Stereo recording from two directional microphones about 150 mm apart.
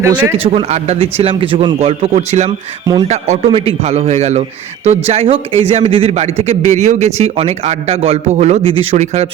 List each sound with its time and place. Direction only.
0.0 s speech: 15° right (ahead or behind)
0.4 s a man's voice: 40° right (ahead or behind)